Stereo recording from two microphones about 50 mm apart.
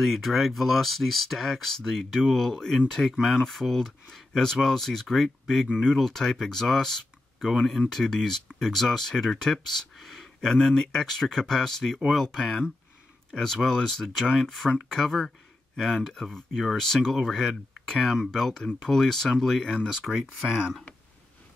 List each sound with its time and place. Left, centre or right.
0.0 s speech: centre
3.2 s speech: centre
3.4 s speech: centre
20.1 s speech: centre